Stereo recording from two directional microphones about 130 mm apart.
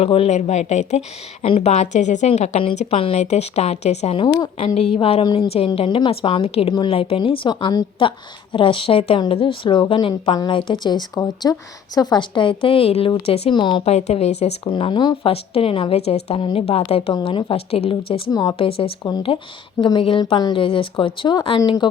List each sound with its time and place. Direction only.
0.0 s a woman's voice: 50° left (ahead or behind)
2.7 s a woman's voice: 50° left (ahead or behind)
5.2 s a woman's voice: 30° left (ahead or behind)
5.5 s a woman's voice: 50° left (ahead or behind)
13.8 s a woman's voice: 55° left (ahead or behind)
14.7 s speech: 40° left (ahead or behind)
18.3 s a woman's voice: 30° left (ahead or behind)
18.5 s a woman's voice: 45° left (ahead or behind)